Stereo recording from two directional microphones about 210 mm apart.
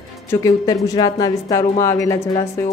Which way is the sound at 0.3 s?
15° left (ahead or behind).